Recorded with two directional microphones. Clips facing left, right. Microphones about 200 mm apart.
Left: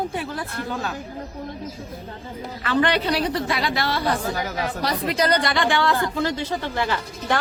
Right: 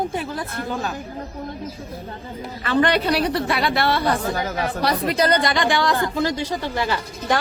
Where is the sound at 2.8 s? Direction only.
55° right (ahead or behind).